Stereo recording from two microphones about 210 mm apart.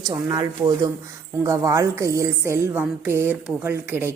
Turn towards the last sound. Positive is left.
turn(degrees=-10)  # may be behind; listen again after turning